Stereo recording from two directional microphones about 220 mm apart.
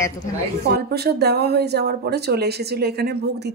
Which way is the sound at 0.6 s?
45° right (ahead or behind).